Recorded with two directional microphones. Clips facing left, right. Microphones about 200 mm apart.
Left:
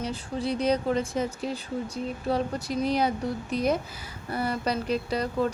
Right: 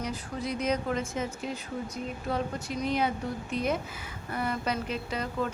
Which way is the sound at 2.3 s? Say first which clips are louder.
Left 4 dB; 35° left (ahead or behind).